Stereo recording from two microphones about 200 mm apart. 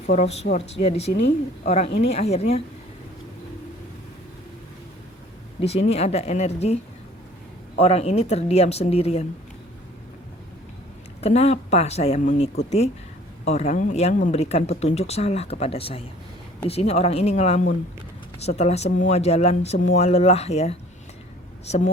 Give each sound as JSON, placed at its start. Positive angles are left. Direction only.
{"t": 0.1, "sound": "speech", "side_deg": 35}
{"t": 5.5, "sound": "speech", "side_deg": 30}
{"t": 7.8, "sound": "speech", "side_deg": 30}
{"t": 11.2, "sound": "speech", "side_deg": 30}